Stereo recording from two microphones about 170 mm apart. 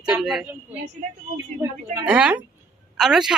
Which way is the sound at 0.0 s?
Centre (ahead or behind).